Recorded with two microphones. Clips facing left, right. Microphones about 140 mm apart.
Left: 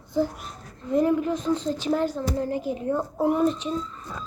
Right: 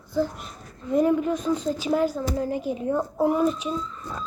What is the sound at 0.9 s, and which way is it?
A woman's voice, 20° right (ahead or behind).